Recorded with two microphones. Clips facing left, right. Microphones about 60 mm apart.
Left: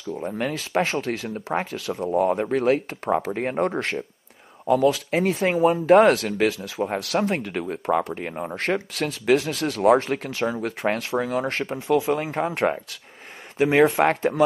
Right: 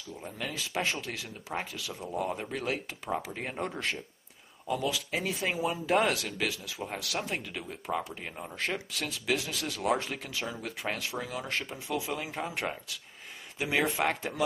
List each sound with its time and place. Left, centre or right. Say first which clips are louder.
0.1 s speech: left 11 dB; left